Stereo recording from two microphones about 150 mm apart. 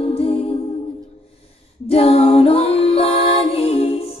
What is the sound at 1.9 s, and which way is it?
Music, 40° left (ahead or behind).